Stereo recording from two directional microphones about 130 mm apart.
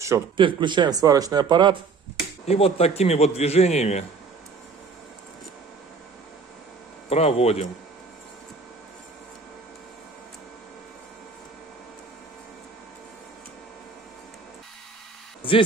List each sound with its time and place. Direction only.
0.4 s speech: 40° right (ahead or behind)
2.4 s a man's voice: 50° left (ahead or behind)
7.1 s speech: 50° left (ahead or behind)